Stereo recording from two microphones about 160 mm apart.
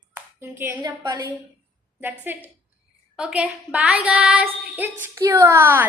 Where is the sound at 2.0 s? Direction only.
10° right (ahead or behind).